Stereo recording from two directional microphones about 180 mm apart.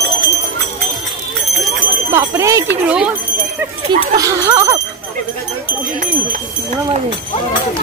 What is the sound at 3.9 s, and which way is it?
Speech, 20° right (ahead or behind).